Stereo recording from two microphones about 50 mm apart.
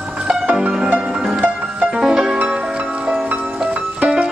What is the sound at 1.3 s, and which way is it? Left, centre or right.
Music, right.